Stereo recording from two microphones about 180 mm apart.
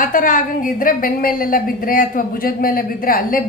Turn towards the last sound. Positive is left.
turn(degrees=50)  # may be behind; listen again after turning